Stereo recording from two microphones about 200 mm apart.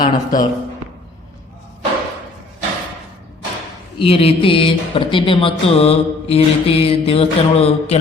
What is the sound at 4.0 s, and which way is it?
Music, 30° left (ahead or behind).